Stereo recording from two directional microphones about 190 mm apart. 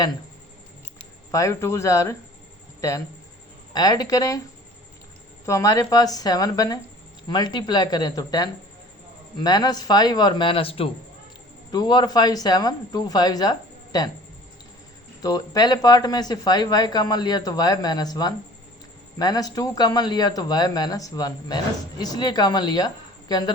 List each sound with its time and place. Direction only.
1.3 s speech: 15° left (ahead or behind)
3.7 s a man's voice: 20° left (ahead or behind)
5.5 s a man's voice: 15° left (ahead or behind)
15.2 s a man's voice: 20° left (ahead or behind)